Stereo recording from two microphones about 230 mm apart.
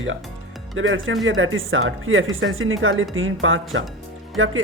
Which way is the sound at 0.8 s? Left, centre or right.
Right.